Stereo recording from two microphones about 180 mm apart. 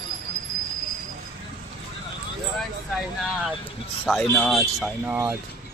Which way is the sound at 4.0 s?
10° left (ahead or behind).